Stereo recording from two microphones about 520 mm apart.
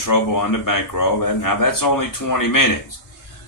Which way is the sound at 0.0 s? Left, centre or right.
Left.